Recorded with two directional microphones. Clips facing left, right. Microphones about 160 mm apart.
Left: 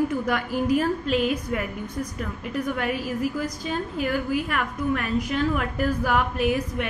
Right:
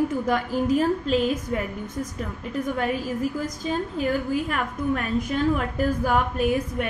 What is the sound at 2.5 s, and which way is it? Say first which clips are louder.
Speech: right 1 dB; 30° right (ahead or behind).